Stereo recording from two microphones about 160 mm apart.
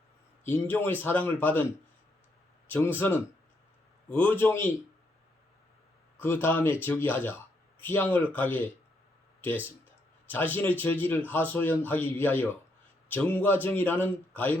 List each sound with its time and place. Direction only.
0.4 s a man's voice: 10° left (ahead or behind)
2.6 s a man's voice: 15° left (ahead or behind)
6.1 s a man's voice: 15° left (ahead or behind)